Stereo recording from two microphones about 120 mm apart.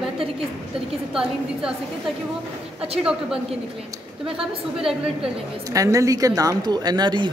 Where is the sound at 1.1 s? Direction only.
5° right (ahead or behind).